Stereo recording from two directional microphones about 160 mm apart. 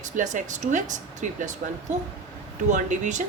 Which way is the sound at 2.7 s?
50° right (ahead or behind).